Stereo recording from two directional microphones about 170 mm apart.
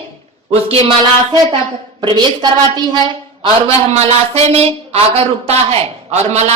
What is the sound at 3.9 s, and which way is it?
Speech, 35° right (ahead or behind).